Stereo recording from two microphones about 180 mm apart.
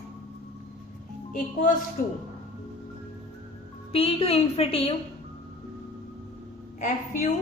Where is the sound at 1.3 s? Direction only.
45° left (ahead or behind).